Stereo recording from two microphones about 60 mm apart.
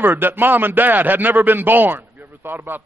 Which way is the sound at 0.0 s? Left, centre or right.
Right.